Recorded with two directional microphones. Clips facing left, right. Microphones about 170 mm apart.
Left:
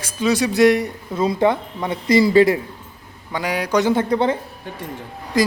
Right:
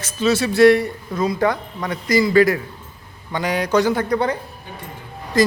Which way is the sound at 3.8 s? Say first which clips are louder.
Left 2 dB; 25° left (ahead or behind).